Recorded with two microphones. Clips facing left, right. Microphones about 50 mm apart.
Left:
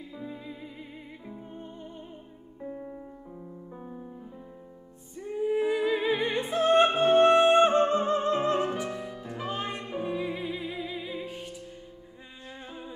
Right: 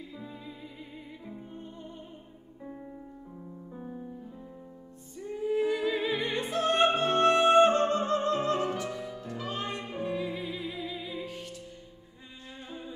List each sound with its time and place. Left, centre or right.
0.1 s music: centre
2.6 s music: centre
6.4 s opera: centre
7.0 s music: centre
9.8 s music: centre
10.0 s music: centre